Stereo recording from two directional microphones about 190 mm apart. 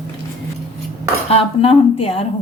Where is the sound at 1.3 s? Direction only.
30° left (ahead or behind).